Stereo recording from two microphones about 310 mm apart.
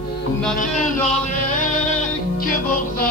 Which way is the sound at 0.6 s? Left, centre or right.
Left.